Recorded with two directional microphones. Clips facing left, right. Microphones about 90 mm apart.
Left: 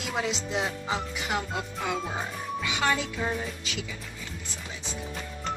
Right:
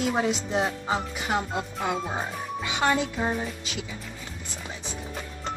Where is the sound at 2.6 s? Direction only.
30° right (ahead or behind).